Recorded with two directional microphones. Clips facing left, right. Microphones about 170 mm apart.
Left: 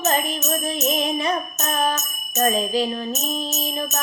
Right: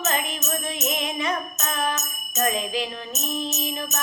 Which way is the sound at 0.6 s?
35° left (ahead or behind).